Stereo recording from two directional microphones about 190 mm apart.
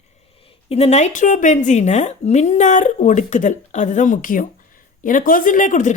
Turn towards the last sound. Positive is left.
turn(degrees=40)  # may be behind; listen again after turning